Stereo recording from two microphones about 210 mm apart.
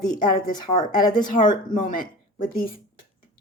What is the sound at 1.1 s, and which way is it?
Speech, 40° left (ahead or behind).